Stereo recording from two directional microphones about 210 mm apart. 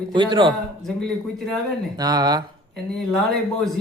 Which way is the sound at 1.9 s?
20° right (ahead or behind).